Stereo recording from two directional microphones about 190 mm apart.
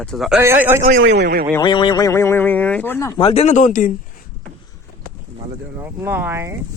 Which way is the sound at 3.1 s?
30° left (ahead or behind).